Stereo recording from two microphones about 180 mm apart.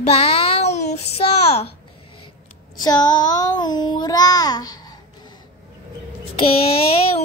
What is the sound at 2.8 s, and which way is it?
Child singing, 20° left (ahead or behind).